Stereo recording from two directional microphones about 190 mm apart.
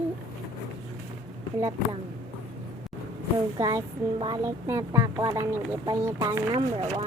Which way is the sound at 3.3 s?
15° right (ahead or behind).